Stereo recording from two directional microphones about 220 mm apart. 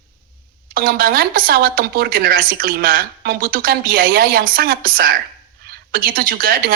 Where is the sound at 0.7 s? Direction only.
40° right (ahead or behind).